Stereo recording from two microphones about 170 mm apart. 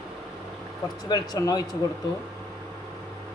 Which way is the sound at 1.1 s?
20° left (ahead or behind).